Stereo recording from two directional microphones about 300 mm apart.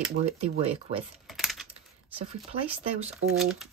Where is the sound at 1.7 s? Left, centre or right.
Centre.